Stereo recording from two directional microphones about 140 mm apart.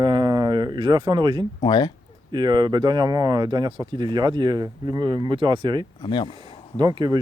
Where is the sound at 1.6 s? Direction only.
30° left (ahead or behind).